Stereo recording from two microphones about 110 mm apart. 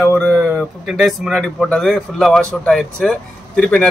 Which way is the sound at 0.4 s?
10° right (ahead or behind).